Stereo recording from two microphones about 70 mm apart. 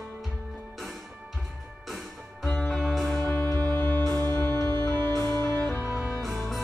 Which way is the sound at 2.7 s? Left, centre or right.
Centre.